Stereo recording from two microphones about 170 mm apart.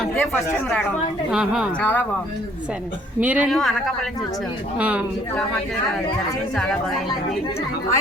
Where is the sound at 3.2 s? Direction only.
10° right (ahead or behind).